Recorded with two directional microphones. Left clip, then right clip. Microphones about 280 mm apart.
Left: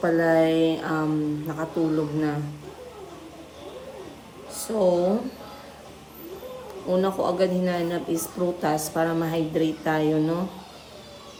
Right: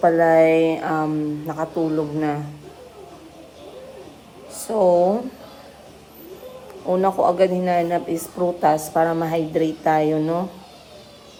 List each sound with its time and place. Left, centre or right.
0.0 s a woman's voice: centre
4.6 s a woman's voice: centre
6.9 s a woman's voice: centre